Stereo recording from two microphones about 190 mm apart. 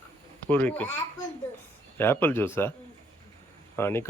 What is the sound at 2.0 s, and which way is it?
Speech, 10° left (ahead or behind).